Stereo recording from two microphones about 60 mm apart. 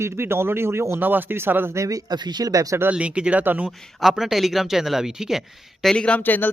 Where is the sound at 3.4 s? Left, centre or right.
Right.